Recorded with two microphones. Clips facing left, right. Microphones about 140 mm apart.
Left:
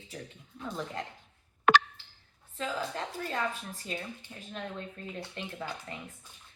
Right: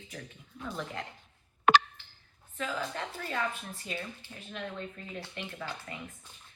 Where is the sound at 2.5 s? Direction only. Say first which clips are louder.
Left 1 dB; 30° left (ahead or behind).